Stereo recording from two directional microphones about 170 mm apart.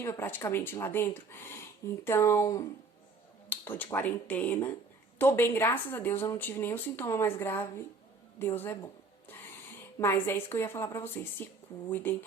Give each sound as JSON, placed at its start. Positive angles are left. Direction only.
{"t": 0.0, "sound": "speech", "side_deg": 15}
{"t": 10.0, "sound": "speech", "side_deg": 15}